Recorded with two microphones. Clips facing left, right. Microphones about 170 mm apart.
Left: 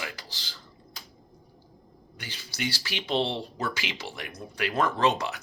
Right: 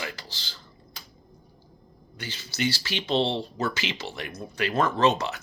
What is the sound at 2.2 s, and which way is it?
Speech, 10° left (ahead or behind).